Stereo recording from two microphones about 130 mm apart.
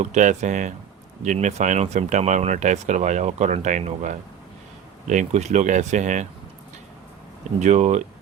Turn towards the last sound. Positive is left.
turn(degrees=-60)  # may be behind; listen again after turning